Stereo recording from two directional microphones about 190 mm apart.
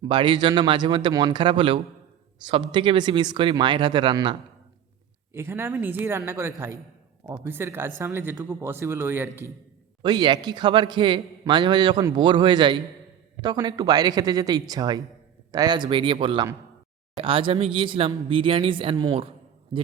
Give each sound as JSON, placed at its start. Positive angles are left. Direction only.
{"t": 0.0, "sound": "a man's voice", "side_deg": -25}
{"t": 5.3, "sound": "speech", "side_deg": -15}
{"t": 10.0, "sound": "a man's voice", "side_deg": -20}